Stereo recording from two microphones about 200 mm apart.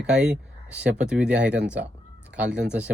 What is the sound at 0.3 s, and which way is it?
Speech, 5° right (ahead or behind).